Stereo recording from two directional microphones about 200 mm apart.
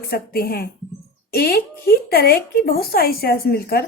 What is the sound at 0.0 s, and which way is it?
Speech, 50° left (ahead or behind).